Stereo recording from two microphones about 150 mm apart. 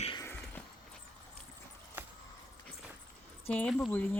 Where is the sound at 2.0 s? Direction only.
15° right (ahead or behind).